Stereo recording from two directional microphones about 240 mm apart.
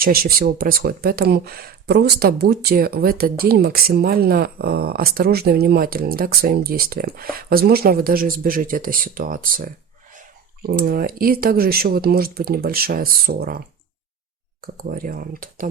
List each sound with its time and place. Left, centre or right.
0.0 s speech: right
14.6 s speech: right